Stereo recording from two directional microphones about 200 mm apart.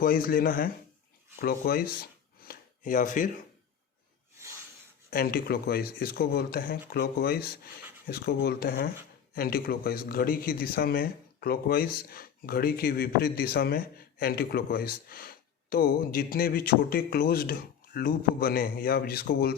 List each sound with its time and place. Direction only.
0.0 s speech: 45° left (ahead or behind)
2.4 s a sound: 45° left (ahead or behind)
5.1 s speech: 50° left (ahead or behind)